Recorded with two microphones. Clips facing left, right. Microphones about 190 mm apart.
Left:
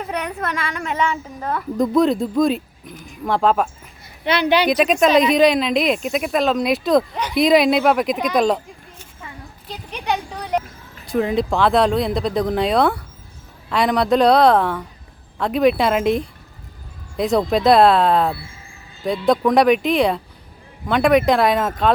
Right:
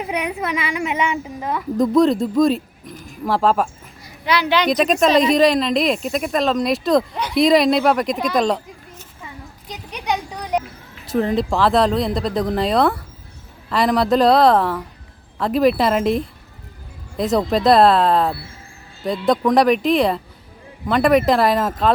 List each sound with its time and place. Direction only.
0.0 s a woman's voice: 10° right (ahead or behind)
1.8 s speech: centre (ahead or behind)
4.3 s a woman's voice: 25° left (ahead or behind)
4.5 s speech: 5° left (ahead or behind)
9.6 s a sound: 10° right (ahead or behind)
11.0 s speech: centre (ahead or behind)